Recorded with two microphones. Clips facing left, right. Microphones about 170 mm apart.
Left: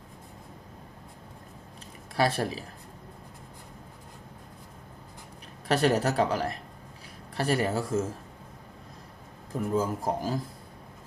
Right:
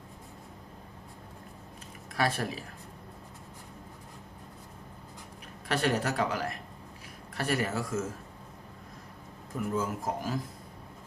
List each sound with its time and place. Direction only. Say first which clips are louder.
2.1 s speech: left 4 dB; 35° left (ahead or behind)
5.6 s speech: left 5 dB; 35° left (ahead or behind)
9.6 s speech: left 4 dB; 30° left (ahead or behind)